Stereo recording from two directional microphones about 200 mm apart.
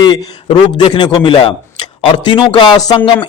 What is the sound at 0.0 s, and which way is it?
A man's voice, 25° left (ahead or behind).